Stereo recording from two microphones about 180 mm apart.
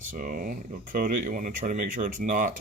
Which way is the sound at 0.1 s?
50° right (ahead or behind).